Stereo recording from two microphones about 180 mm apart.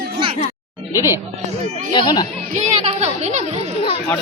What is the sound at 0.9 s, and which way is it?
Speech, 20° left (ahead or behind).